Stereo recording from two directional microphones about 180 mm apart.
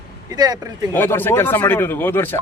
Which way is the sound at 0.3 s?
20° right (ahead or behind).